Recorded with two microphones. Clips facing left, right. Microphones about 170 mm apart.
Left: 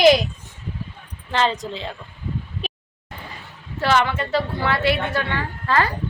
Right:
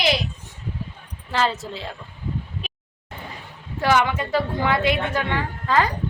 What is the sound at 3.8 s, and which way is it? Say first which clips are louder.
Speech: even; 15° right (ahead or behind).